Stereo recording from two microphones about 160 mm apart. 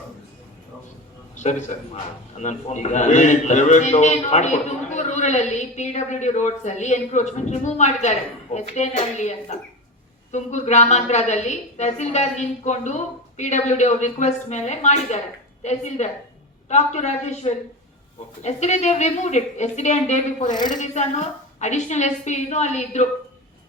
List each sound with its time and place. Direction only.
1.4 s a man's voice: 50° left (ahead or behind)
10.3 s a man's voice: 45° left (ahead or behind)
20.5 s a woman's voice: 25° left (ahead or behind)
20.7 s a man's voice: 45° left (ahead or behind)